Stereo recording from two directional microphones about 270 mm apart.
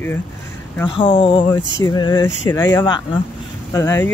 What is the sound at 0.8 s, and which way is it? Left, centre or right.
Speech, centre.